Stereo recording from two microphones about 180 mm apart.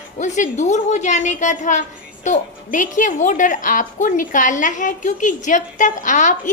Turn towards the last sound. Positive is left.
turn(degrees=45)  # may be behind; listen again after turning